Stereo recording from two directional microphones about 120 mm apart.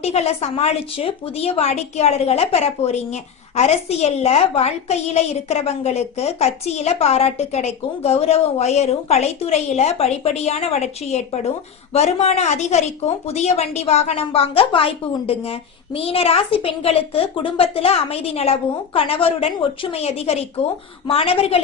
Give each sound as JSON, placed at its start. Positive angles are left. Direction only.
{"t": 0.0, "sound": "a woman's voice", "side_deg": 60}